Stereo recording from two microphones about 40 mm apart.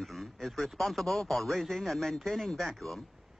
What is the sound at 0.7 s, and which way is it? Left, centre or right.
Speech, centre.